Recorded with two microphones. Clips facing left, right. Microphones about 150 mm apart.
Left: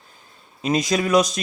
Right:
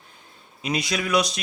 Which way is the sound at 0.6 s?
45° left (ahead or behind).